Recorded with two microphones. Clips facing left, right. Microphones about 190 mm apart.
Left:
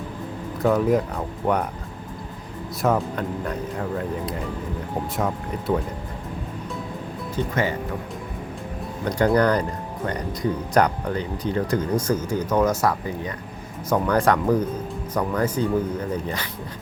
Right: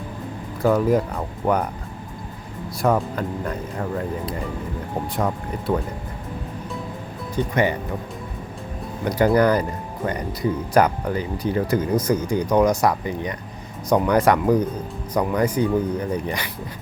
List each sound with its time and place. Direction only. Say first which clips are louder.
0.6 s speech: right 1 dB; centre (ahead or behind)
2.8 s speech: right 1 dB; centre (ahead or behind)
5.1 s speech: right 2 dB; centre (ahead or behind)
7.5 s speech: right 4 dB; 20° right (ahead or behind)
9.0 s speech: right 2 dB; 5° right (ahead or behind)